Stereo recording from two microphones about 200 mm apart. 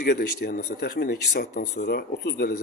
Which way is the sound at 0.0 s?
50° left (ahead or behind).